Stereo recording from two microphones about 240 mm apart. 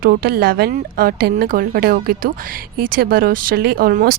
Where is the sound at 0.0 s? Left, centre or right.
Right.